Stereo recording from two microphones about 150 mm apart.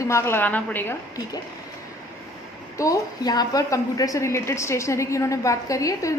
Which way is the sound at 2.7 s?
25° left (ahead or behind).